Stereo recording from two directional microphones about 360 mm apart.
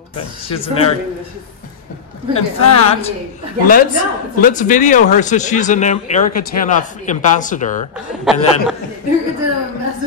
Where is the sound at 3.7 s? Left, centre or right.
Left.